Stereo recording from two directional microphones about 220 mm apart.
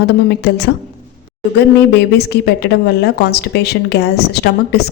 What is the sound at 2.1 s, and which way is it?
Speech, 50° left (ahead or behind).